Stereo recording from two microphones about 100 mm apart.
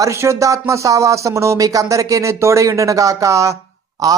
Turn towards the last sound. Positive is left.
turn(degrees=-35)  # may be behind; listen again after turning